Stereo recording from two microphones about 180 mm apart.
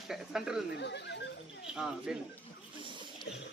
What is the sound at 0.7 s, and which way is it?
Speech, 70° left (ahead or behind).